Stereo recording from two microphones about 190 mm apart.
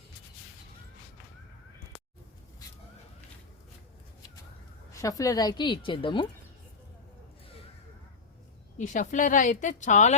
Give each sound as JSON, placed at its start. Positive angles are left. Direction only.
{"t": 4.9, "sound": "a woman's voice", "side_deg": 15}
{"t": 8.8, "sound": "speech", "side_deg": 40}